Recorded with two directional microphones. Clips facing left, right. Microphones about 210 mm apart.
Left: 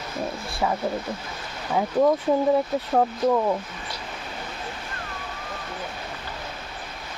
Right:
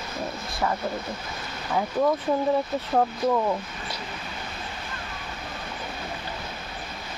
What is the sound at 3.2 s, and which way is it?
Speech, 15° left (ahead or behind).